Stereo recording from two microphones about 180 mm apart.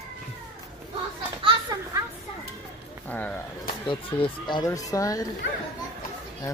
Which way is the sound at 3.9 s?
25° left (ahead or behind).